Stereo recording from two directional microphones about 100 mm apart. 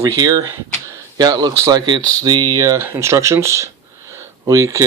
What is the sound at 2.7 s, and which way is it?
Speech, 25° right (ahead or behind).